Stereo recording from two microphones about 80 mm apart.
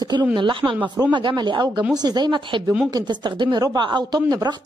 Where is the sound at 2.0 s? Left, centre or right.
Right.